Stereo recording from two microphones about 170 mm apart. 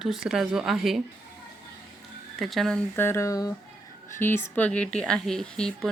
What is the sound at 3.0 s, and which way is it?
Speech, 15° left (ahead or behind).